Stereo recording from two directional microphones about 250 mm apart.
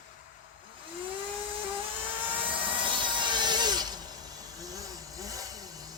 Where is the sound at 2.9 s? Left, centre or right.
Centre.